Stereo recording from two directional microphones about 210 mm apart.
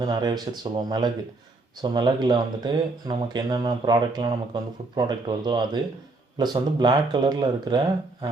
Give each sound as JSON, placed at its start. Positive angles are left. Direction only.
{"t": 0.0, "sound": "speech", "side_deg": -20}